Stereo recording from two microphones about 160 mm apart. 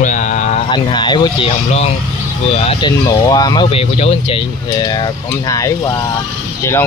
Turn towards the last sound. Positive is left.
turn(degrees=15)  # may be behind; listen again after turning